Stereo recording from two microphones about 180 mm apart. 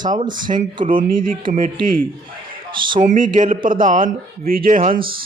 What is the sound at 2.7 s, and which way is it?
Speech, 25° right (ahead or behind).